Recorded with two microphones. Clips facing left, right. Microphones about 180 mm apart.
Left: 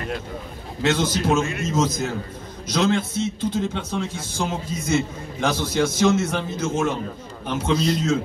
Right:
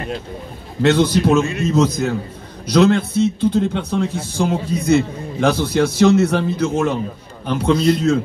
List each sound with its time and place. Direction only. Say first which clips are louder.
0.8 s a man's voice: right 7 dB; 60° right (ahead or behind)